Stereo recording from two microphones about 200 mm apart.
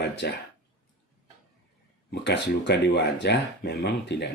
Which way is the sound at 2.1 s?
60° left (ahead or behind).